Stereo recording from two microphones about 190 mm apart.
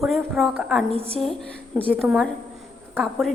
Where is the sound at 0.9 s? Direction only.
30° right (ahead or behind).